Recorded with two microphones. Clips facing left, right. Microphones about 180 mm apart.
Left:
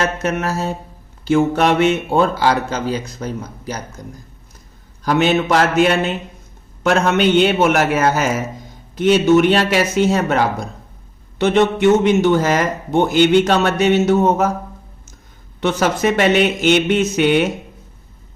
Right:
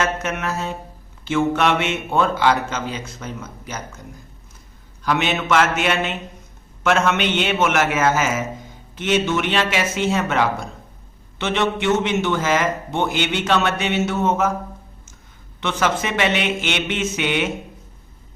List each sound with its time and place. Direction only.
0.0 s a man's voice: 35° left (ahead or behind)
5.0 s a man's voice: 40° left (ahead or behind)
15.6 s a man's voice: 40° left (ahead or behind)